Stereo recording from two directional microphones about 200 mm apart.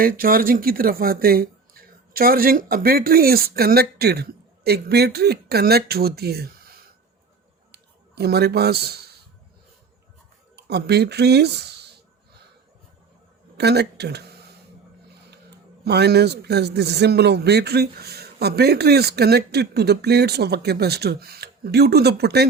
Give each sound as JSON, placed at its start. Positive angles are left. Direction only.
{"t": 0.0, "sound": "a man's voice", "side_deg": -45}
{"t": 10.5, "sound": "speech", "side_deg": -55}
{"t": 13.6, "sound": "speech", "side_deg": -55}
{"t": 15.4, "sound": "a man's voice", "side_deg": -55}